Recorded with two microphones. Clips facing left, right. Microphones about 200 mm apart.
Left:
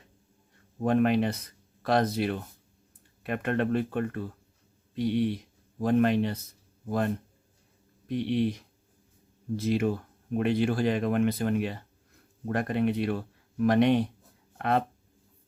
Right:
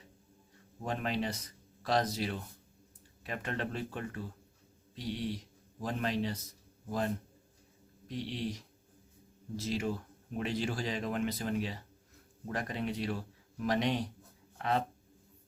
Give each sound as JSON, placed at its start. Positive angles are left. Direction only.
{"t": 0.8, "sound": "speech", "side_deg": 55}
{"t": 8.0, "sound": "speech", "side_deg": 60}